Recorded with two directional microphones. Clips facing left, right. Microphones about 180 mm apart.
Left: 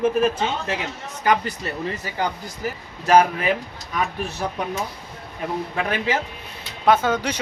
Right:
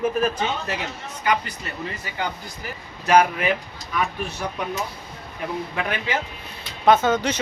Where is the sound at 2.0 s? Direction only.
40° left (ahead or behind).